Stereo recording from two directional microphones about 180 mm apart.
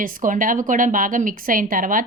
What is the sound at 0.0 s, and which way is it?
A woman's voice, 45° right (ahead or behind).